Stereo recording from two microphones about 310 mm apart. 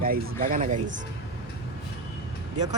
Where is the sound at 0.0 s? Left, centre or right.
Right.